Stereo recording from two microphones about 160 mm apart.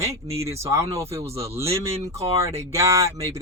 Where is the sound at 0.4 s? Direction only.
15° right (ahead or behind).